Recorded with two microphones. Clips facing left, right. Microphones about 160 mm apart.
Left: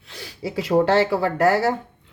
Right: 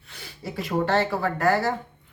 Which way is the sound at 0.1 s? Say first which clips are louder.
Left 6 dB; 90° left.